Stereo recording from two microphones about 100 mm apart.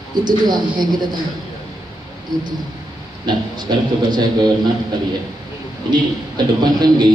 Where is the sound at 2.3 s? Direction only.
45° right (ahead or behind).